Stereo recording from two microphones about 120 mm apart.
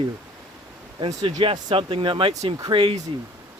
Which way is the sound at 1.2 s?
45° right (ahead or behind).